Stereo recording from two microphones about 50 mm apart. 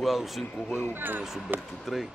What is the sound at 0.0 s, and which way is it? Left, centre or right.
Speech, centre.